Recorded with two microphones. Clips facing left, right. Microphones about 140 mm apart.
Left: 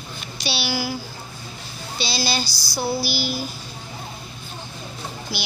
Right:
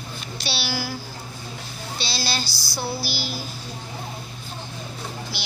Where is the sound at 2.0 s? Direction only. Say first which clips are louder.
Left 4 dB; centre (ahead or behind).